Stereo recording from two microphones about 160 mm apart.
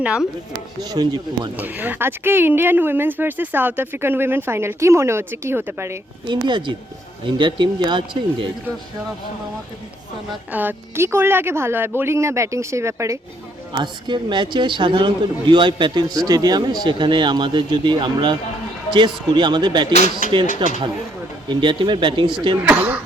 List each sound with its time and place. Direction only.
0.0 s speech: 5° right (ahead or behind)
0.8 s a man's voice: 25° right (ahead or behind)
1.5 s speech: 10° right (ahead or behind)
6.2 s a man's voice: 30° right (ahead or behind)
10.5 s speech: 10° right (ahead or behind)
13.7 s a man's voice: 30° right (ahead or behind)
20.0 s speech: 55° left (ahead or behind)
20.6 s a man's voice: 30° right (ahead or behind)